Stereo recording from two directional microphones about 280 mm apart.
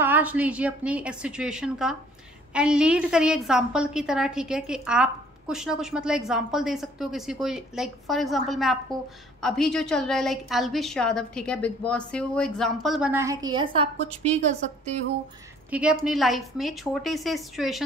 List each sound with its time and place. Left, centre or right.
0.0 s a woman's voice: centre; by 15.0 s right
15.7 s a woman's voice: centre